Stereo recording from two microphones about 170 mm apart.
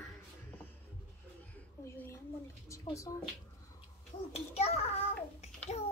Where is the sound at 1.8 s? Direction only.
15° left (ahead or behind).